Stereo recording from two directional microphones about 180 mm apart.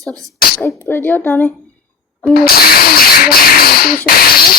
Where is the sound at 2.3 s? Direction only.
55° left (ahead or behind).